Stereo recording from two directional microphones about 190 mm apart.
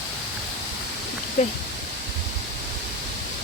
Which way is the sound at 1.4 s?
40° left (ahead or behind).